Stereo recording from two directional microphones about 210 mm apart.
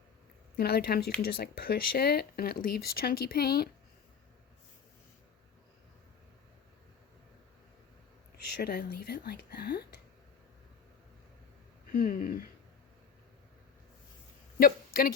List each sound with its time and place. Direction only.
0.5 s speech: 50° left (ahead or behind)
8.4 s speech: 50° left (ahead or behind)
11.9 s speech: 40° left (ahead or behind)
14.6 s speech: 45° left (ahead or behind)